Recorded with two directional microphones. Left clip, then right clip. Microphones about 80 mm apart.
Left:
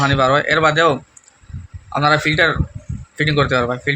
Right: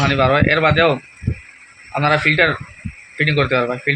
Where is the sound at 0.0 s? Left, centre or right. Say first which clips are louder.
Even; centre.